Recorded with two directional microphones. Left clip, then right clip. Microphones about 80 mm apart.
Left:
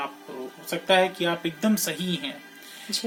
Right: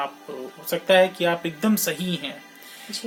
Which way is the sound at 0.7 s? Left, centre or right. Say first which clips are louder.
Right 4 dB; right.